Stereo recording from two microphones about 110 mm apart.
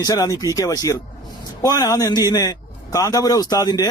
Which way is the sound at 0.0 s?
30° left (ahead or behind).